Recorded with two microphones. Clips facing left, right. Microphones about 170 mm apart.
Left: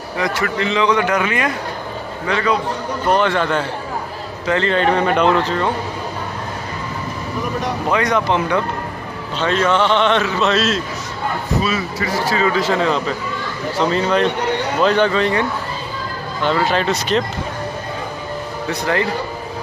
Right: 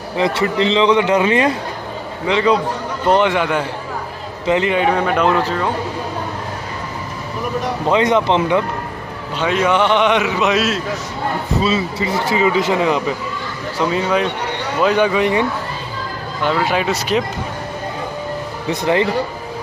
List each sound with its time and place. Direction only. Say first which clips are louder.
0.2 s a man's voice: right 4 dB; 25° right (ahead or behind); by 5.7 s 5° right (ahead or behind)
7.9 s a man's voice: right 3 dB; 25° right (ahead or behind)
11.6 s a man's voice: right 3 dB; 25° right (ahead or behind)
16.4 s a man's voice: even; 10° right (ahead or behind)
18.7 s speech: right 4 dB; 20° right (ahead or behind)